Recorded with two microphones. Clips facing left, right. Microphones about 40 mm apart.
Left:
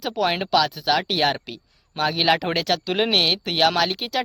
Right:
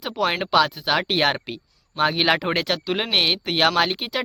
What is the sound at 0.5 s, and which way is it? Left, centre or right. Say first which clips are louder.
Speech: right 1 dB; centre.